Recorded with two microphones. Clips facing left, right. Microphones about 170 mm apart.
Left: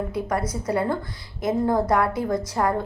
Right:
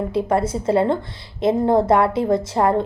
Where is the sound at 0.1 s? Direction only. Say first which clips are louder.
Right 6 dB; 25° right (ahead or behind).